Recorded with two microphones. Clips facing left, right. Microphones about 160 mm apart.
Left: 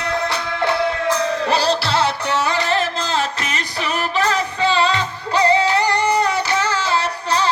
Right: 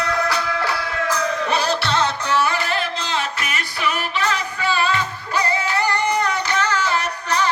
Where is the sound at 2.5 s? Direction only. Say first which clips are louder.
Left 4 dB; 30° left (ahead or behind).